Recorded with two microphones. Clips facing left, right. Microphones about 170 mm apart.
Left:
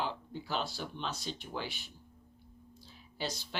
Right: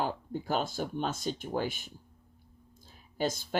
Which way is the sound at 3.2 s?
50° right (ahead or behind).